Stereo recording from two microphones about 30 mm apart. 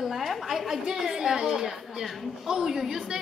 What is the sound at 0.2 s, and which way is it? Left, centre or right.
A woman's voice, centre.